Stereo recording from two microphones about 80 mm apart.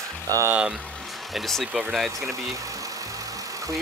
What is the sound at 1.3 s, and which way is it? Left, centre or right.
Speech, centre.